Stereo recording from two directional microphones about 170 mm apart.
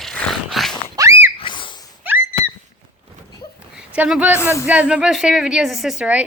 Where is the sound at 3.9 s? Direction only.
10° right (ahead or behind).